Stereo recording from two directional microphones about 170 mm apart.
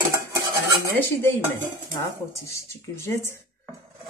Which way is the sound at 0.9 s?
10° left (ahead or behind).